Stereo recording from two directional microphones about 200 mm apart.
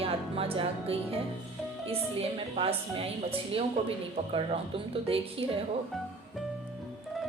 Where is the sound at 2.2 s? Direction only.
30° right (ahead or behind).